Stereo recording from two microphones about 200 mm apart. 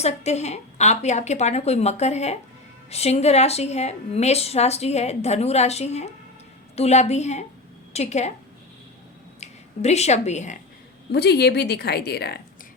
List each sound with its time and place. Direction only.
0.0 s a woman's voice: 35° left (ahead or behind)
9.4 s speech: 35° left (ahead or behind)
11.1 s a woman's voice: 55° left (ahead or behind)